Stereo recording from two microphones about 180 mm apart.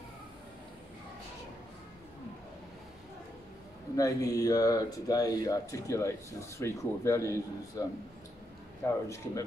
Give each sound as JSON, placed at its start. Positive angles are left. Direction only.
{"t": 3.9, "sound": "a man's voice", "side_deg": 20}